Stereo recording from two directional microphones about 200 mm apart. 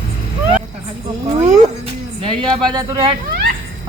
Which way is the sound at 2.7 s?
20° right (ahead or behind).